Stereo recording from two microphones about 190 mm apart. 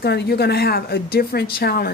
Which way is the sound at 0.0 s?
55° left (ahead or behind).